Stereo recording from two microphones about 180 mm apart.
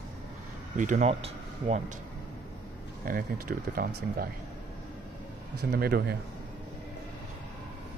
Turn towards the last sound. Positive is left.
turn(degrees=-60)  # may be behind; listen again after turning